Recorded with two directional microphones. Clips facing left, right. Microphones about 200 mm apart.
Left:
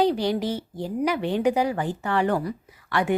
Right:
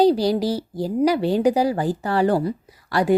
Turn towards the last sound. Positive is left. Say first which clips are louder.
# right 5 dB
turn(degrees=-35)  # may be behind; listen again after turning